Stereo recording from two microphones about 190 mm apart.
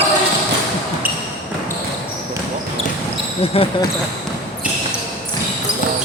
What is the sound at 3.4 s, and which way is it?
Speech, 30° left (ahead or behind).